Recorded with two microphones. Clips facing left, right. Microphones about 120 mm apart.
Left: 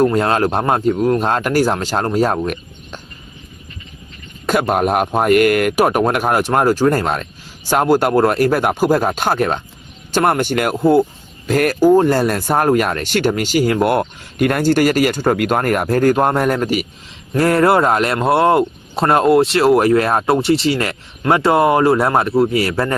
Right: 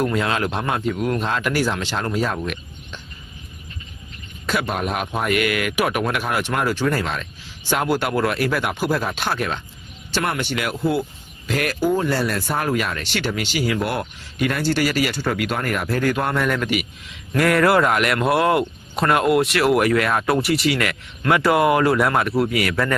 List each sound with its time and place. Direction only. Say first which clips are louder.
0.0 s speech: left 7 dB; 40° left (ahead or behind)
4.4 s speech: left 8 dB; 45° left (ahead or behind); by 23.0 s 30° left (ahead or behind)